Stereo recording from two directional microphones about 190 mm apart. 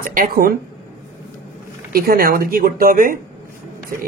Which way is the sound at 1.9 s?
50° right (ahead or behind).